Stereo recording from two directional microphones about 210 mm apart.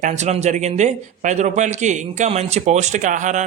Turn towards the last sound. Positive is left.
turn(degrees=-35)  # may be behind; listen again after turning